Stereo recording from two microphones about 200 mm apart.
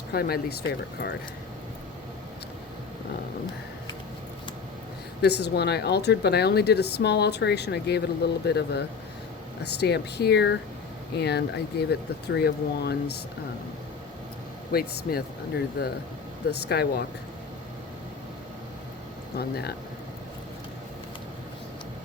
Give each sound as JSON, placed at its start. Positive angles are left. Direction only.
{"t": 0.1, "sound": "speech", "side_deg": 50}
{"t": 5.2, "sound": "speech", "side_deg": 55}
{"t": 14.7, "sound": "speech", "side_deg": 50}
{"t": 19.4, "sound": "speech", "side_deg": 50}